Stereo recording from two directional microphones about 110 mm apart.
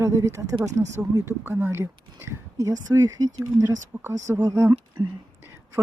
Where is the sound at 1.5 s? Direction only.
20° right (ahead or behind).